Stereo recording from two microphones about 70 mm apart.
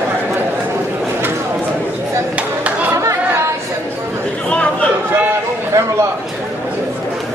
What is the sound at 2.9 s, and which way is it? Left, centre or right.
Chatter, right.